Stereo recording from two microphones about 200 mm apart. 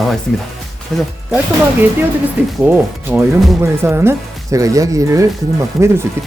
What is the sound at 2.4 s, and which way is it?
Speech, 5° right (ahead or behind).